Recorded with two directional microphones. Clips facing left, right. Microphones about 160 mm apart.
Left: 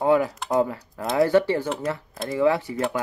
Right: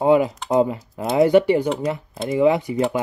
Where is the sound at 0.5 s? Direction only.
20° right (ahead or behind).